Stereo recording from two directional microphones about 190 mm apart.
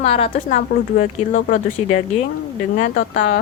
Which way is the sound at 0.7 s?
45° left (ahead or behind).